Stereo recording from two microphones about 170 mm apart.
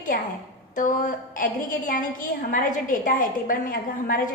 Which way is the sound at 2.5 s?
50° left (ahead or behind).